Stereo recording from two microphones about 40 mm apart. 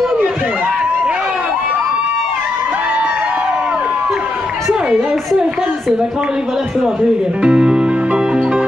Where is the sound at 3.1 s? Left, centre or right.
Right.